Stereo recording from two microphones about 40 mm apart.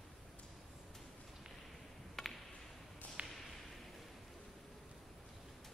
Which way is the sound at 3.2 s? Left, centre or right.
Right.